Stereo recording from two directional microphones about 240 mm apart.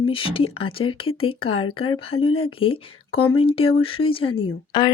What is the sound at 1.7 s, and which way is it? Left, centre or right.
Speech, left.